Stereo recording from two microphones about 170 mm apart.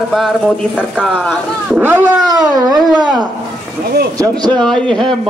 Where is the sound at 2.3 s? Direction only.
20° right (ahead or behind).